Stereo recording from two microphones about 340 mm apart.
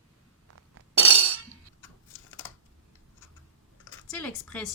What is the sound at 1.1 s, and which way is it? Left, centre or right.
Chink, right.